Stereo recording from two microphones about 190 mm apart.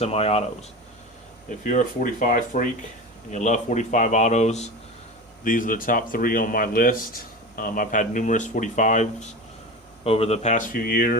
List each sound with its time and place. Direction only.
0.0 s speech: 35° left (ahead or behind)
1.5 s speech: 40° left (ahead or behind)